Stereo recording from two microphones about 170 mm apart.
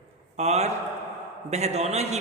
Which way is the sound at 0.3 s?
40° right (ahead or behind).